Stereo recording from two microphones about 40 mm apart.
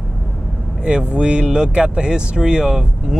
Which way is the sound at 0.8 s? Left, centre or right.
Right.